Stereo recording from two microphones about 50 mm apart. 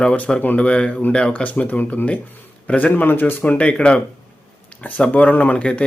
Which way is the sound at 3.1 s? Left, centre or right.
Left.